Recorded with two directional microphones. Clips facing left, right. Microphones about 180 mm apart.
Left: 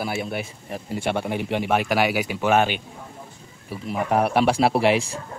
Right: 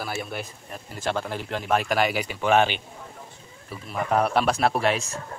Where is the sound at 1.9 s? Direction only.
5° left (ahead or behind).